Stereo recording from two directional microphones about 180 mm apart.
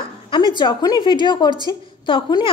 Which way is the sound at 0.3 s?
25° left (ahead or behind).